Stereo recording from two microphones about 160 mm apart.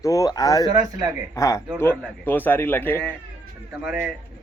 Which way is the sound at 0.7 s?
25° right (ahead or behind).